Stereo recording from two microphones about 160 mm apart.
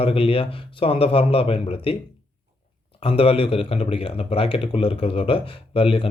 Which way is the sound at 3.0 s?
35° left (ahead or behind).